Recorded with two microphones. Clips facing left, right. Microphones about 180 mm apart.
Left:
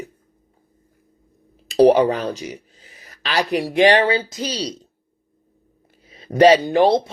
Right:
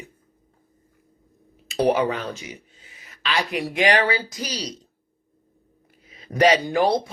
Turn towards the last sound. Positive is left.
turn(degrees=25)  # may be behind; listen again after turning